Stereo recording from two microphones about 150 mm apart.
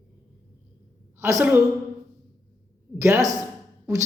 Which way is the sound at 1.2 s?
20° right (ahead or behind).